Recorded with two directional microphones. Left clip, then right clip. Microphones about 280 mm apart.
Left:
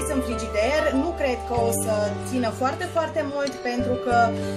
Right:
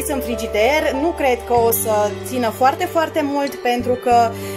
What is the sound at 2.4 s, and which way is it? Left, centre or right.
Music, right.